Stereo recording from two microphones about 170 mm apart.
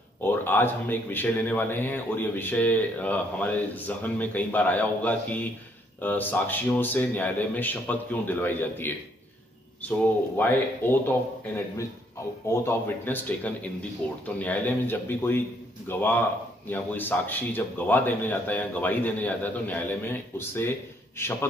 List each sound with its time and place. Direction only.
0.2 s a man's voice: 10° left (ahead or behind)